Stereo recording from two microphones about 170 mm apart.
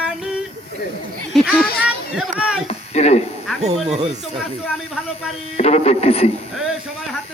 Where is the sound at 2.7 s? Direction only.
40° left (ahead or behind).